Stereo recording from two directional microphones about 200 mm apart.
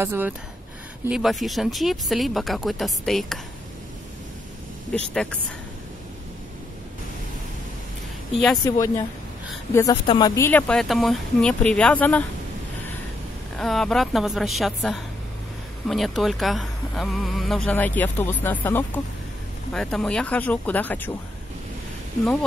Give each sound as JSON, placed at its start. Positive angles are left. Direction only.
{"t": 0.0, "sound": "speech", "side_deg": -10}
{"t": 1.0, "sound": "speech", "side_deg": 0}
{"t": 5.1, "sound": "speech", "side_deg": 5}
{"t": 8.6, "sound": "speech", "side_deg": 15}
{"t": 13.6, "sound": "speech", "side_deg": 0}